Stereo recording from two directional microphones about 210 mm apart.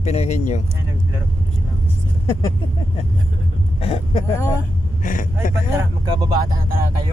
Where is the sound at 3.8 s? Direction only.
25° left (ahead or behind).